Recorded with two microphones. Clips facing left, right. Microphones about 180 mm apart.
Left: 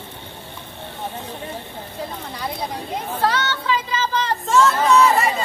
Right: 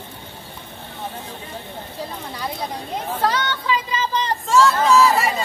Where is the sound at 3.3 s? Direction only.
15° right (ahead or behind).